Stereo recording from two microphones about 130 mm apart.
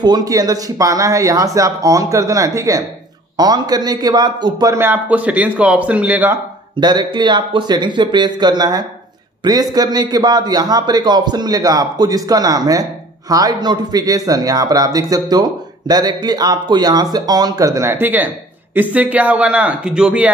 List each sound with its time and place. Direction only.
0.0 s a man's voice: 30° right (ahead or behind)
4.7 s speech: 15° right (ahead or behind)
6.8 s a man's voice: 35° right (ahead or behind); by 20.3 s 10° right (ahead or behind)